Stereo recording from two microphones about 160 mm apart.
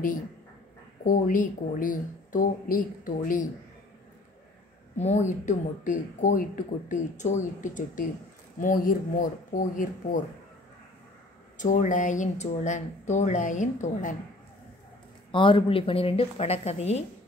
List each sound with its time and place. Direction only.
1.0 s speech: 55° left (ahead or behind)
4.9 s speech: 45° left (ahead or behind)
11.5 s speech: 50° left (ahead or behind)
15.3 s a woman's voice: 30° left (ahead or behind)